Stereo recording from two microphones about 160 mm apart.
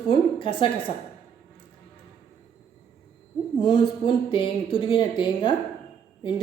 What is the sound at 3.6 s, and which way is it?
Speech, 30° left (ahead or behind).